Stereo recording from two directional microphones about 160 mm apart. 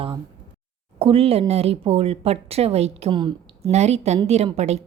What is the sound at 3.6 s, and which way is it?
A woman's voice, 45° right (ahead or behind).